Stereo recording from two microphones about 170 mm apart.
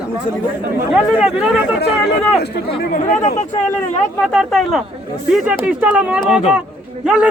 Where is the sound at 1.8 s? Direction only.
75° left (ahead or behind).